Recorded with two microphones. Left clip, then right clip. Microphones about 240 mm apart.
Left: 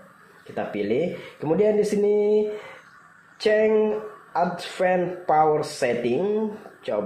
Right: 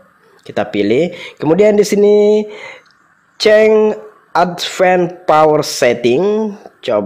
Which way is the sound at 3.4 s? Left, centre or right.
Right.